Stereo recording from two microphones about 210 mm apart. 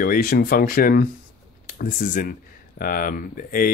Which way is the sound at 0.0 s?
45° left (ahead or behind).